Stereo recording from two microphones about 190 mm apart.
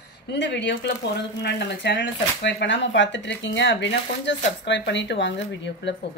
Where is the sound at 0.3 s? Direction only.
65° left (ahead or behind).